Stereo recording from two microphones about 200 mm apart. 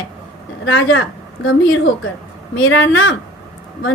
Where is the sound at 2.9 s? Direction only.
90° left.